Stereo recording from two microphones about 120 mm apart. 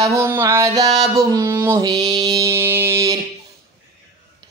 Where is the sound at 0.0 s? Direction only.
25° right (ahead or behind).